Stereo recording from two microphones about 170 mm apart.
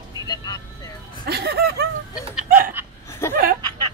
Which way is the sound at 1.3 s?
70° right (ahead or behind).